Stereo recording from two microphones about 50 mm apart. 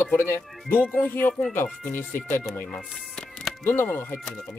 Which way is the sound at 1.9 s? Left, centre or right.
Left.